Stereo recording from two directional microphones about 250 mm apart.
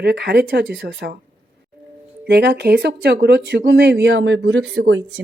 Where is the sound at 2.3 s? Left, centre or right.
Right.